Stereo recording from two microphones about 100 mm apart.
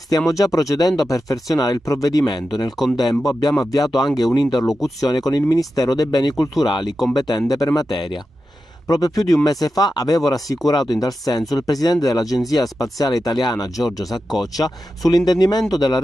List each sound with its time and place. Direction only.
0.2 s speech: 35° left (ahead or behind)